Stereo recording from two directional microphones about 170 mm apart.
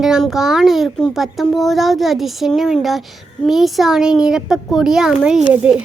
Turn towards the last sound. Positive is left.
turn(degrees=-10)  # may be behind; listen again after turning